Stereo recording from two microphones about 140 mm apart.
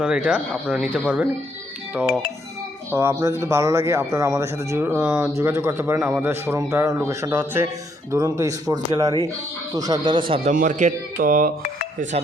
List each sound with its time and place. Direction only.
0.0 s speech: 5° right (ahead or behind)
2.9 s speech: 20° right (ahead or behind); by 10.4 s 35° right (ahead or behind)
10.5 s speech: 65° right (ahead or behind)